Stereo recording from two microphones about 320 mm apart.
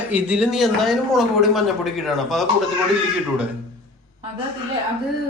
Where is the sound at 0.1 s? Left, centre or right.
Centre.